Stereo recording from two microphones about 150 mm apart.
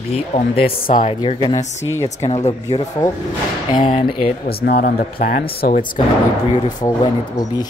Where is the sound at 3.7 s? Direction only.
35° left (ahead or behind).